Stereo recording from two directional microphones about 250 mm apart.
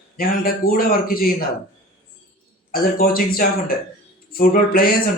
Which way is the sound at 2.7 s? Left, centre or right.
Left.